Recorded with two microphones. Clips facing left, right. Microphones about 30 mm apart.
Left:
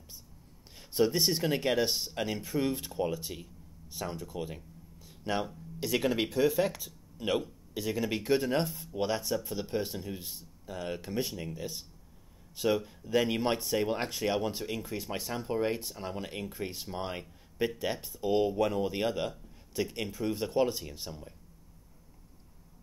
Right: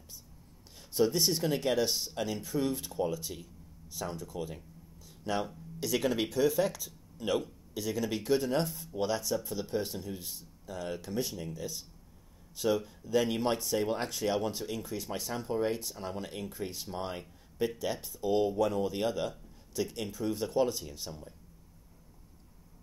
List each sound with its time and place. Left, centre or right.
0.7 s speech: centre
3.0 s speech: left
5.0 s a sound: left
5.9 s speech: centre
8.6 s speech: centre
8.9 s speech: left